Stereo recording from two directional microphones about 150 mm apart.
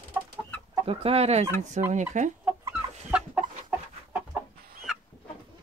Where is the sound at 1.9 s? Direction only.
55° right (ahead or behind).